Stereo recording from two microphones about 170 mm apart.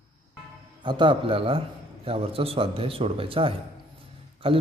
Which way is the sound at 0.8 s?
30° right (ahead or behind).